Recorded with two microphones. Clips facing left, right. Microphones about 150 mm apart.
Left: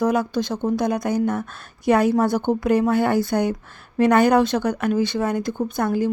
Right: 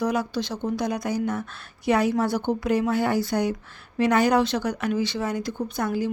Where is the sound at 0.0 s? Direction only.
50° left (ahead or behind).